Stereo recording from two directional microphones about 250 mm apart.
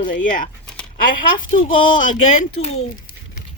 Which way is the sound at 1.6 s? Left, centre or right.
Left.